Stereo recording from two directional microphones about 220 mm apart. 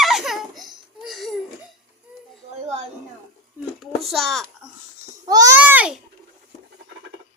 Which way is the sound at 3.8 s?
Centre (ahead or behind).